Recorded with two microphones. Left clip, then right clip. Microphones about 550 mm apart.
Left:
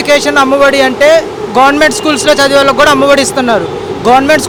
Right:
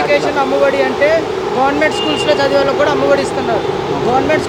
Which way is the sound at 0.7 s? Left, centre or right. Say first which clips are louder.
Left 6 dB; left.